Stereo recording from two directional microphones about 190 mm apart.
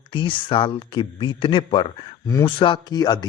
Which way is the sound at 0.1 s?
25° left (ahead or behind).